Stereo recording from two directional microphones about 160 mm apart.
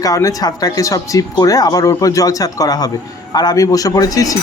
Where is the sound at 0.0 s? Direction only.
20° left (ahead or behind).